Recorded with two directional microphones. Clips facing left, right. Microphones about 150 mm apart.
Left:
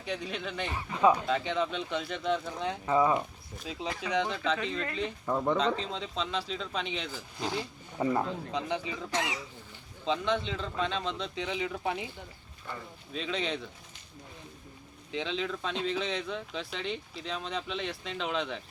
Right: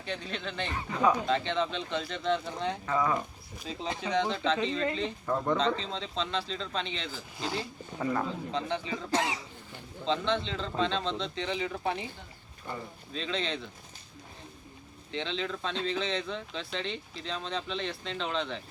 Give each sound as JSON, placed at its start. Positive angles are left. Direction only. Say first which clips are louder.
{"t": 0.0, "sound": "speech", "louder": "left 1 dB", "side_deg": 10}
{"t": 2.8, "sound": "speech", "louder": "left 4 dB", "side_deg": 20}
{"t": 3.2, "sound": "speech", "louder": "left 2 dB", "side_deg": 5}
{"t": 3.8, "sound": "speech", "louder": "right 1 dB", "side_deg": -25}
{"t": 4.1, "sound": "speech", "louder": "right 2 dB", "side_deg": 5}
{"t": 9.1, "sound": "speech", "louder": "right 3 dB", "side_deg": -30}
{"t": 10.1, "sound": "speech", "louder": "even", "side_deg": 10}
{"t": 13.1, "sound": "speech", "louder": "even", "side_deg": 10}
{"t": 15.1, "sound": "speech", "louder": "left 1 dB", "side_deg": 10}